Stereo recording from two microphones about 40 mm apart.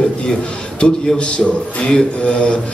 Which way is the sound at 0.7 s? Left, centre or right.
Left.